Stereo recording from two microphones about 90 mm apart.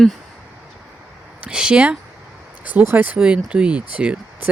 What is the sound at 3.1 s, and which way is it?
Speech, 10° right (ahead or behind).